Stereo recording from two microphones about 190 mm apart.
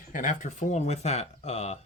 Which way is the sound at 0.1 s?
45° left (ahead or behind).